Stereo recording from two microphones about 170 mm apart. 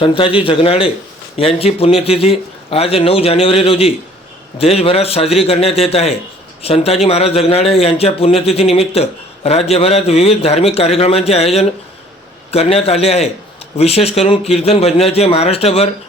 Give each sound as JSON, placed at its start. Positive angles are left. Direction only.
{"t": 0.0, "sound": "speech", "side_deg": 30}